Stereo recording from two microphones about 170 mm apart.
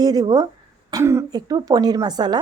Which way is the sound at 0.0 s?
25° right (ahead or behind).